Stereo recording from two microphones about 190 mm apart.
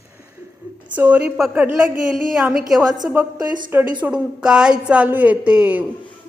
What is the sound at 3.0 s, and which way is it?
Speech, 20° right (ahead or behind).